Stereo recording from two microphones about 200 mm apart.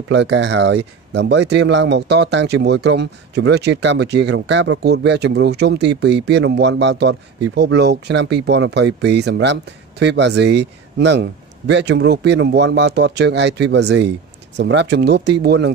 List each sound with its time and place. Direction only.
0.1 s speech: 60° right (ahead or behind)